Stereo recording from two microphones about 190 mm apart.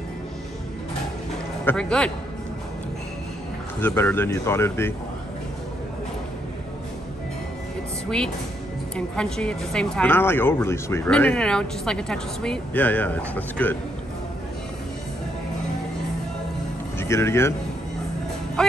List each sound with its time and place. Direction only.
1.7 s a man's voice: 5° left (ahead or behind)
3.8 s speech: 10° left (ahead or behind)
8.9 s speech: 5° left (ahead or behind)
17.0 s speech: 15° left (ahead or behind)
18.6 s music: 5° left (ahead or behind)